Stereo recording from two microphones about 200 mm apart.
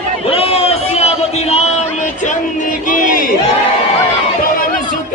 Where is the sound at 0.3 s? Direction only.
30° left (ahead or behind).